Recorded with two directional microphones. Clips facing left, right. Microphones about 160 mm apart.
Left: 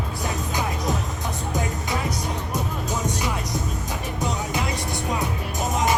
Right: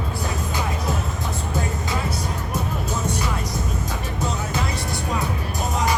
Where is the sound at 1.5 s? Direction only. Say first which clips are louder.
Even; 15° left (ahead or behind).